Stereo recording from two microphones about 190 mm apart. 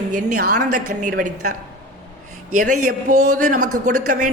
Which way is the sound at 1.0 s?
45° right (ahead or behind).